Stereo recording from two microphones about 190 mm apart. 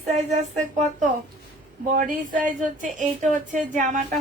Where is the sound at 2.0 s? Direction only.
45° right (ahead or behind).